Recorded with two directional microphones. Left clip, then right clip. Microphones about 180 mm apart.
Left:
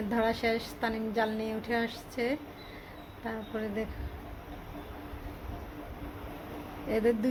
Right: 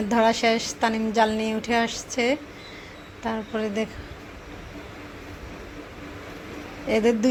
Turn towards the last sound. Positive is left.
turn(degrees=-25)  # may be behind; listen again after turning